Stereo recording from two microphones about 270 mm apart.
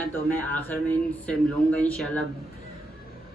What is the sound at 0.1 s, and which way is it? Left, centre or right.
A man's voice, centre.